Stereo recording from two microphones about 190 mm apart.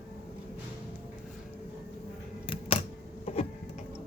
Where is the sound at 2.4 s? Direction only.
30° left (ahead or behind).